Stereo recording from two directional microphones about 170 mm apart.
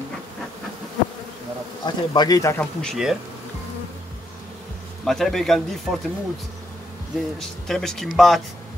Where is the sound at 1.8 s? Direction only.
25° left (ahead or behind).